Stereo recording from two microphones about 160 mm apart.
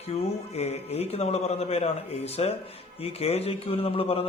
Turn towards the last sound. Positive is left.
turn(degrees=35)  # may be behind; listen again after turning